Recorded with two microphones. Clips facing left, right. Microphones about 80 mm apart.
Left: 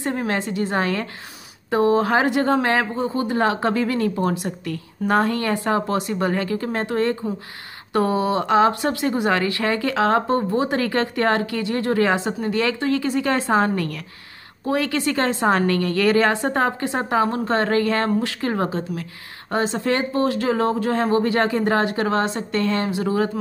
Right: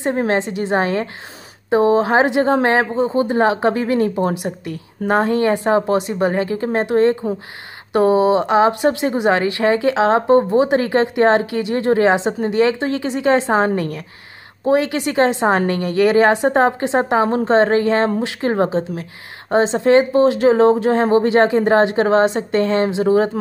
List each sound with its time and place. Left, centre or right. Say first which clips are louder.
0.0 s speech: right 6 dB; right